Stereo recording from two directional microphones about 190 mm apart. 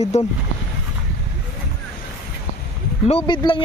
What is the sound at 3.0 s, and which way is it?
Speech, 30° left (ahead or behind).